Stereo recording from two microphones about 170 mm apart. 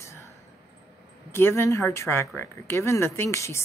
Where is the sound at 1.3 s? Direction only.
15° left (ahead or behind).